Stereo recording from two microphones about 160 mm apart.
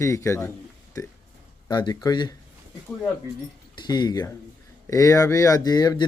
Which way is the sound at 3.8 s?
25° left (ahead or behind).